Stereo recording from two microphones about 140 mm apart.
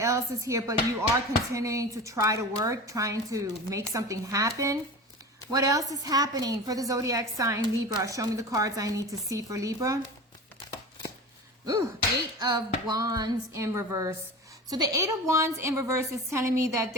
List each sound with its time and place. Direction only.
0.0 s a woman's voice: 25° right (ahead or behind)
11.6 s slap: 25° right (ahead or behind)
12.4 s a woman's voice: 30° right (ahead or behind)